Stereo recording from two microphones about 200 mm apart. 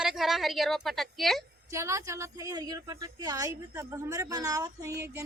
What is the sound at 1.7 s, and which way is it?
A woman's voice, 15° right (ahead or behind).